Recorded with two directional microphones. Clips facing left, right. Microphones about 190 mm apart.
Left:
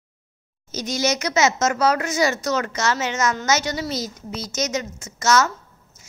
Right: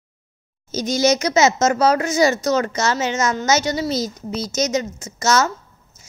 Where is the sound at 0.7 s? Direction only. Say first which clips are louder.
Right 5 dB; 35° right (ahead or behind).